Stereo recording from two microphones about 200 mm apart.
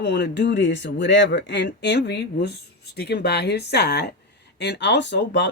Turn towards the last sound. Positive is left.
turn(degrees=60)  # may be behind; listen again after turning